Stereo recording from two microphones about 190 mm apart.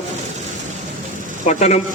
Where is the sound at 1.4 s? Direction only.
35° left (ahead or behind).